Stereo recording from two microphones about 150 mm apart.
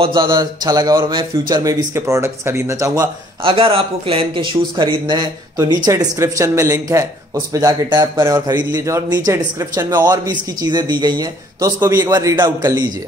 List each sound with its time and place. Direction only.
0.0 s speech: 30° right (ahead or behind)
3.4 s speech: 40° right (ahead or behind); by 12.4 s 20° right (ahead or behind)